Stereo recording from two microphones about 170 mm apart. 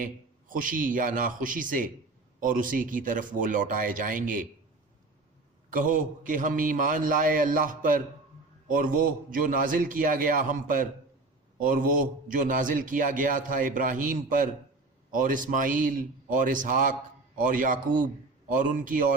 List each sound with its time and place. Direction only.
0.0 s a man's voice: 55° right (ahead or behind)
5.7 s a man's voice: 50° right (ahead or behind)